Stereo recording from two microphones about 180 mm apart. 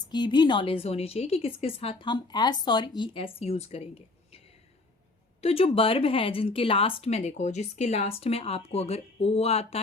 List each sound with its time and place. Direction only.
0.0 s speech: 25° left (ahead or behind)
5.4 s speech: 35° left (ahead or behind)